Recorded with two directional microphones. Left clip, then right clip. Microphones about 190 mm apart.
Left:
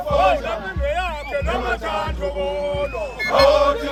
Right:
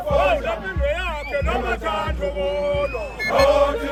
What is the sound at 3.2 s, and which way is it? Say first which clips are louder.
Music: left 2 dB; 20° left (ahead or behind).